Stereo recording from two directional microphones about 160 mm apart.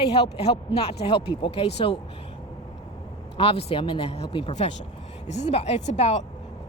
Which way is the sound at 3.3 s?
35° left (ahead or behind).